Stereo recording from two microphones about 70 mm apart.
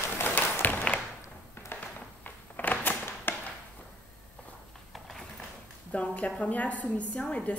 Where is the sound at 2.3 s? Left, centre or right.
Left.